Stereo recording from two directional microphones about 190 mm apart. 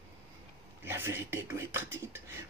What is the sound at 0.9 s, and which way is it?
Speech, 10° right (ahead or behind).